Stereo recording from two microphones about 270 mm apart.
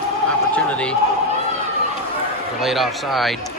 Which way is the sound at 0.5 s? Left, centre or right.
Centre.